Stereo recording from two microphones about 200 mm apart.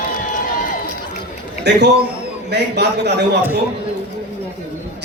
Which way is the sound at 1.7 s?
55° right (ahead or behind).